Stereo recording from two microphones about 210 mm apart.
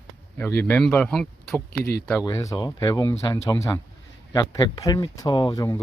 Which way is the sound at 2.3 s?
15° left (ahead or behind).